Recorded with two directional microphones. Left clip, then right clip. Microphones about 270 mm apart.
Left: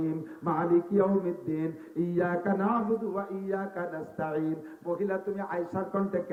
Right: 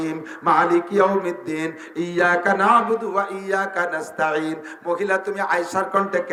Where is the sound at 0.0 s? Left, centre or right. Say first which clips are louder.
Right 9 dB; centre.